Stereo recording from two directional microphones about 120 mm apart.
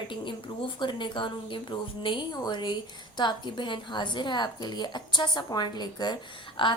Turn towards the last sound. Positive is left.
turn(degrees=45)  # may be behind; listen again after turning